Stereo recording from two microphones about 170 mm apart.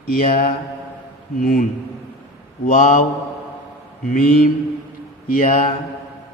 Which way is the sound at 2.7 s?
50° left (ahead or behind).